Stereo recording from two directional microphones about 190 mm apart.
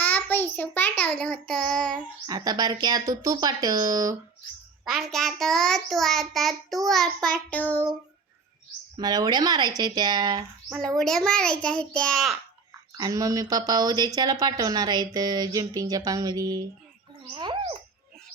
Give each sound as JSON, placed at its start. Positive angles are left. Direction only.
{"t": 0.0, "sound": "a child's voice", "side_deg": 10}
{"t": 2.2, "sound": "a woman's voice", "side_deg": -20}
{"t": 4.9, "sound": "a child's voice", "side_deg": 0}
{"t": 9.0, "sound": "a woman's voice", "side_deg": -20}
{"t": 10.8, "sound": "a child's voice", "side_deg": 5}
{"t": 13.0, "sound": "a woman's voice", "side_deg": -20}
{"t": 17.3, "sound": "a sound", "side_deg": -25}